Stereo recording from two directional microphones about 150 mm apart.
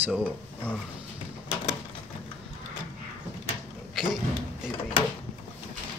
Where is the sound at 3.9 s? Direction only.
Centre (ahead or behind).